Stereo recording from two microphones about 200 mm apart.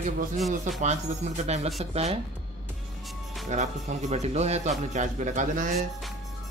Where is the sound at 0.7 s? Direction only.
35° right (ahead or behind).